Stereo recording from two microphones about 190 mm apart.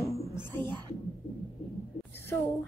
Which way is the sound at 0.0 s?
15° left (ahead or behind).